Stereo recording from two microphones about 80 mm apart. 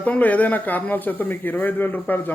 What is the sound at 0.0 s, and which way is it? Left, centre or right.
Speech, centre.